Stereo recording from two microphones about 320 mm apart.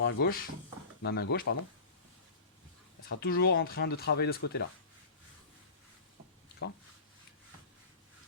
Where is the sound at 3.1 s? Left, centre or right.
Left.